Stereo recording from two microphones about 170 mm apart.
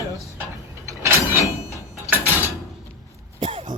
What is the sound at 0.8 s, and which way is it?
Mechanisms, 15° right (ahead or behind).